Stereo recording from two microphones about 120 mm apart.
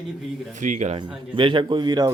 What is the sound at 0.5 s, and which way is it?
Speech, 90° right.